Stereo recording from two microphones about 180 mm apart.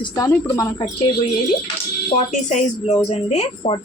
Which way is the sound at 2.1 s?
40° left (ahead or behind).